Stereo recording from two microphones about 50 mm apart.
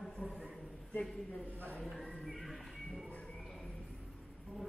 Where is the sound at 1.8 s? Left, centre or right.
Centre.